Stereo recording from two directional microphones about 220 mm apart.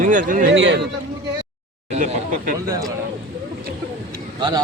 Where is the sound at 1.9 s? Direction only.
30° right (ahead or behind).